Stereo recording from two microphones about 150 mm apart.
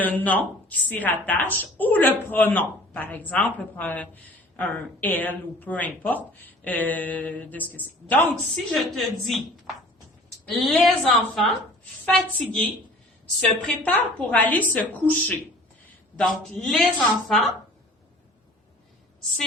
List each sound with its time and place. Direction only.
0.0 s a woman's voice: 10° left (ahead or behind)
8.7 s speech: centre (ahead or behind)
10.5 s a woman's voice: centre (ahead or behind)
13.7 s a woman's voice: 10° left (ahead or behind)